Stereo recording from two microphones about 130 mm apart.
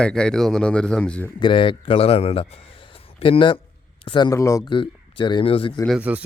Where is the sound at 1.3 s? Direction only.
40° left (ahead or behind).